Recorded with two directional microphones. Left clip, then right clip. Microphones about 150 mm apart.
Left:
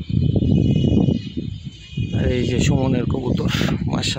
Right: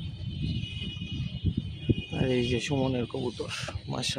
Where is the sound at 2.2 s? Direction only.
15° left (ahead or behind).